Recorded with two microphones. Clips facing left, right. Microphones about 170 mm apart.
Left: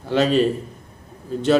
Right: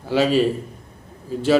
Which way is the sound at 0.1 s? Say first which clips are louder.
Even; 5° right (ahead or behind).